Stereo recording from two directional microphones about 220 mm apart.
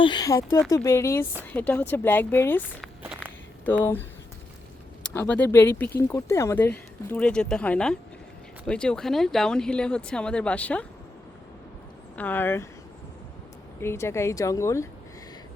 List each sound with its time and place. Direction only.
0.0 s speech: 20° left (ahead or behind)
3.0 s walk: 10° right (ahead or behind)
3.7 s speech: 10° left (ahead or behind)
5.1 s speech: 10° left (ahead or behind)
12.1 s speech: 10° left (ahead or behind)
13.8 s speech: 10° left (ahead or behind)